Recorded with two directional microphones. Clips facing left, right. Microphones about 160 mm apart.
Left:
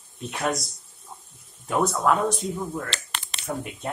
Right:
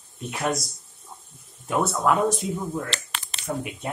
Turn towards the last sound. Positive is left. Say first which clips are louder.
# right 1 dB
turn(degrees=-5)  # may be behind; listen again after turning